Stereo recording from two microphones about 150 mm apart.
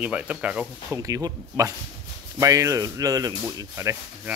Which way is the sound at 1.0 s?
25° right (ahead or behind).